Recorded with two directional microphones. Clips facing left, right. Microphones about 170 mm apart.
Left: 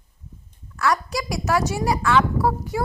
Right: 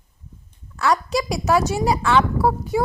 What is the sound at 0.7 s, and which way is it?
A woman's voice, 25° right (ahead or behind).